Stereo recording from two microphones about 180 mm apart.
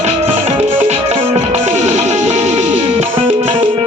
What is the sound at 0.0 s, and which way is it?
Music, 35° right (ahead or behind).